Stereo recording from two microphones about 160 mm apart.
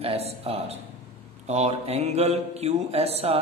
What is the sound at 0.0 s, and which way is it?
Speech, 35° right (ahead or behind).